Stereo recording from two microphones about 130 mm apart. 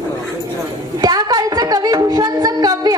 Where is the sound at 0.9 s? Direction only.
30° right (ahead or behind).